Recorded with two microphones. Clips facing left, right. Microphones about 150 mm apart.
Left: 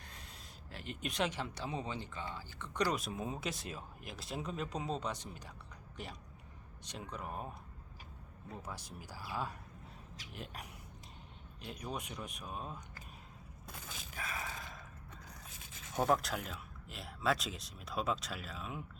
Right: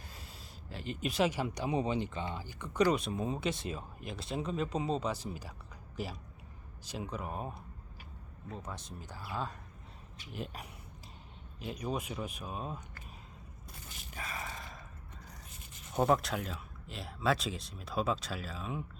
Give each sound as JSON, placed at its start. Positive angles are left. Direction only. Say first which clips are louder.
{"t": 0.7, "sound": "speech", "louder": "right 6 dB", "side_deg": 0}
{"t": 2.8, "sound": "speech", "louder": "right 6 dB", "side_deg": 0}
{"t": 8.6, "sound": "speech", "louder": "right 2 dB", "side_deg": 10}
{"t": 10.3, "sound": "speech", "louder": "right 6 dB", "side_deg": 0}
{"t": 14.2, "sound": "a sound", "louder": "right 1 dB", "side_deg": 0}
{"t": 16.0, "sound": "speech", "louder": "right 3 dB", "side_deg": 0}